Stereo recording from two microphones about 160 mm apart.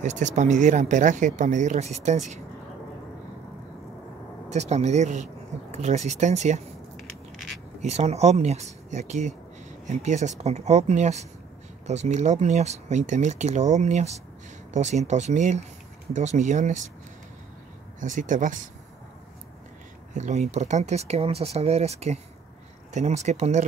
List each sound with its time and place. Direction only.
0.0 s speech: 50° right (ahead or behind)
4.5 s speech: 45° right (ahead or behind)
7.0 s a sound: centre (ahead or behind)
7.8 s speech: 40° right (ahead or behind)
18.0 s speech: 50° right (ahead or behind)
20.2 s speech: 45° right (ahead or behind)